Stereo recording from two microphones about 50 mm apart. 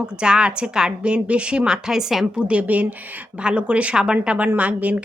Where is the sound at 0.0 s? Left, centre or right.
Centre.